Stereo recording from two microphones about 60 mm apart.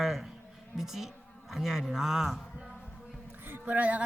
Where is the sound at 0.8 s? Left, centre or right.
Centre.